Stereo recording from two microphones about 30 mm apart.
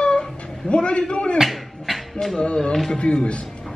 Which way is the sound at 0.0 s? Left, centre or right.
Left.